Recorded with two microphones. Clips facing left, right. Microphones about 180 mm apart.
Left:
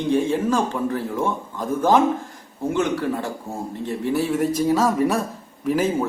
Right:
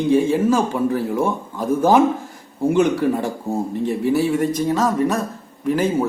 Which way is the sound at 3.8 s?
5° right (ahead or behind).